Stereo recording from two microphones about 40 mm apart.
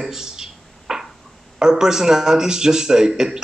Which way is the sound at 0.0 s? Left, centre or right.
Centre.